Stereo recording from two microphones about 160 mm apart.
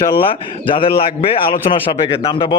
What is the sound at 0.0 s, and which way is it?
A man's voice, 35° left (ahead or behind).